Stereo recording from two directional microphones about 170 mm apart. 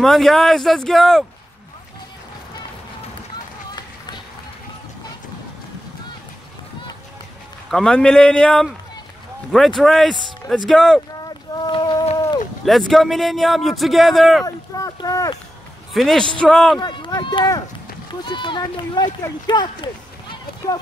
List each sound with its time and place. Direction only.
0.0 s a man's voice: centre (ahead or behind)
7.7 s a man's voice: 5° left (ahead or behind)
9.8 s a man's voice: centre (ahead or behind)
11.2 s run: 25° left (ahead or behind)
12.6 s a man's voice: centre (ahead or behind)
14.4 s speech: 20° left (ahead or behind)
15.9 s a man's voice: centre (ahead or behind)
16.8 s speech: 25° left (ahead or behind)